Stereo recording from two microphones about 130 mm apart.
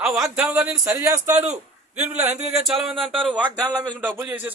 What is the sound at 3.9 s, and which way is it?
Speech, 15° right (ahead or behind).